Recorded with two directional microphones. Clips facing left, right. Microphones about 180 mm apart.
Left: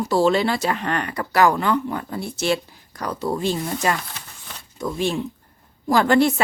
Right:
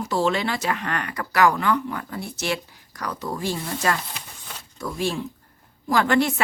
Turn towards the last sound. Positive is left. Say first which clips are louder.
# left 4 dB
turn(degrees=35)  # may be behind; listen again after turning